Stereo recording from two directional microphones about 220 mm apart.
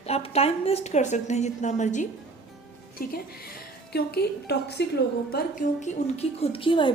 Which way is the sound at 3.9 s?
45° left (ahead or behind).